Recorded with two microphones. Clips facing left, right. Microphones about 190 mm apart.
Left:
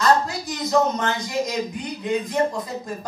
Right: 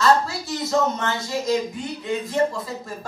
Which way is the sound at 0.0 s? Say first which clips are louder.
Even; 20° left (ahead or behind).